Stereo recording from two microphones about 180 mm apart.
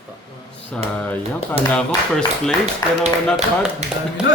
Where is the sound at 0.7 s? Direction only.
10° left (ahead or behind).